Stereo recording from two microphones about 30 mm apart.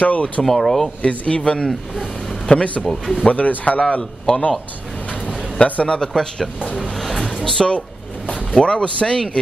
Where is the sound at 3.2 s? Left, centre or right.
Left.